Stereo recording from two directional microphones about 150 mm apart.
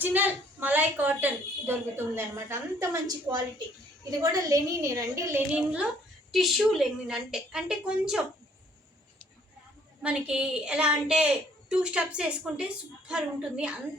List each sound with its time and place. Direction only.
0.0 s a woman's voice: 10° right (ahead or behind)
10.0 s a woman's voice: 5° right (ahead or behind)